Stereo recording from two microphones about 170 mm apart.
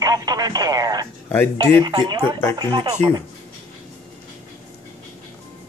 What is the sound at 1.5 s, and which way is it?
Speech, 25° right (ahead or behind).